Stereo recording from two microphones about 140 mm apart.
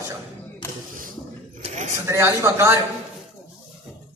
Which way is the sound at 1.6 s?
55° right (ahead or behind).